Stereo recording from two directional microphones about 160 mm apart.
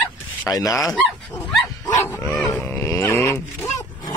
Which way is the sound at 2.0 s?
15° left (ahead or behind).